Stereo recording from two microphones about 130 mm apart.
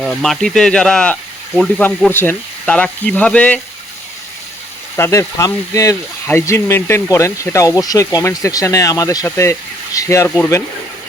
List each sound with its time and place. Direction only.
0.0 s speech: centre (ahead or behind)
4.9 s speech: 20° left (ahead or behind)